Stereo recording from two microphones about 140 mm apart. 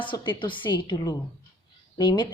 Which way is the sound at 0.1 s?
35° left (ahead or behind).